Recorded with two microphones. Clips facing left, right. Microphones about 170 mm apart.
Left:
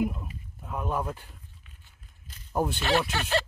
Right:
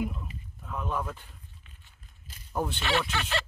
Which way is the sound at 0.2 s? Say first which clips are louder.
Left 1 dB; 15° left (ahead or behind).